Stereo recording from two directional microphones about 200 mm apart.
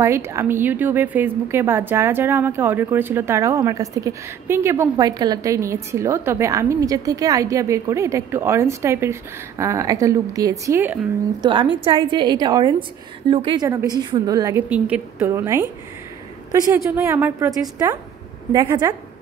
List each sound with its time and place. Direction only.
0.0 s a woman's voice: 15° right (ahead or behind)
11.4 s a woman's voice: 25° right (ahead or behind)
18.7 s a woman's voice: 15° right (ahead or behind)